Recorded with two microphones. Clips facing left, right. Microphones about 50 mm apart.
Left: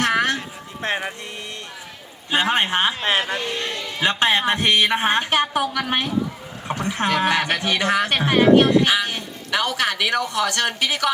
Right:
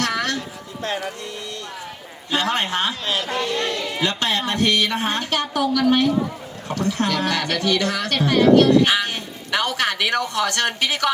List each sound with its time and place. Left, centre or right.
0.0 s a sound: left
2.3 s speech: left
8.8 s speech: centre